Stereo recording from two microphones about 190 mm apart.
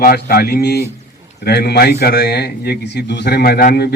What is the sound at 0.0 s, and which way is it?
A man's voice, 50° left (ahead or behind).